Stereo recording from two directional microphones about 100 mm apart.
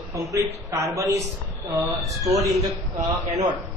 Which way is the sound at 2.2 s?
35° right (ahead or behind).